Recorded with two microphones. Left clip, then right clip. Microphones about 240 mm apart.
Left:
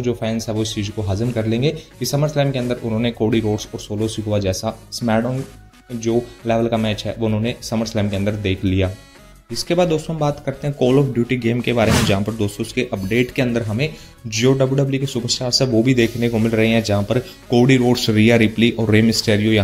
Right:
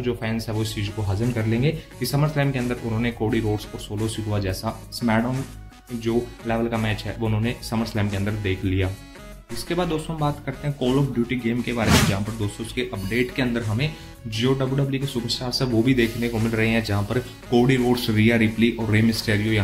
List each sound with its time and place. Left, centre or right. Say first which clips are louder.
0.0 s a man's voice: left 5 dB; centre